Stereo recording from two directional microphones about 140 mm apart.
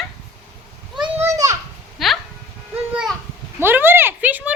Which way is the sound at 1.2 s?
20° right (ahead or behind).